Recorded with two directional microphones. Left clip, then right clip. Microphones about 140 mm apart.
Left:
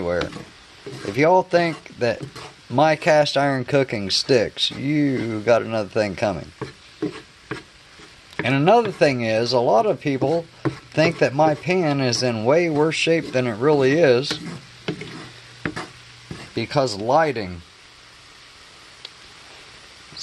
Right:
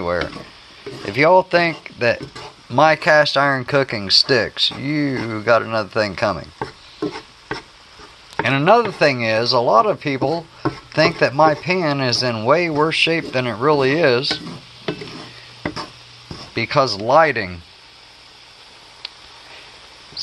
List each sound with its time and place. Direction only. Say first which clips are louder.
1.0 s speech: right 3 dB; 20° left (ahead or behind)
2.7 s speech: right 3 dB; 30° left (ahead or behind)
8.4 s speech: right 3 dB; 30° left (ahead or behind)
16.5 s speech: right 4 dB; 20° left (ahead or behind)